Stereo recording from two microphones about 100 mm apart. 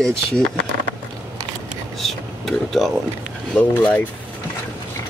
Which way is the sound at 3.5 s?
15° left (ahead or behind).